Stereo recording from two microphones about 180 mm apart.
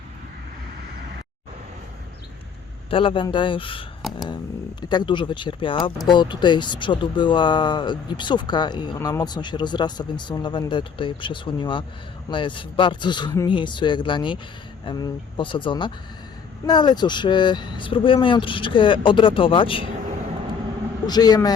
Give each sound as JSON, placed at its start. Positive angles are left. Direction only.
{"t": 2.9, "sound": "speech", "side_deg": 30}
{"t": 4.0, "sound": "a sound", "side_deg": 0}
{"t": 4.9, "sound": "speech", "side_deg": 25}
{"t": 21.1, "sound": "speech", "side_deg": 20}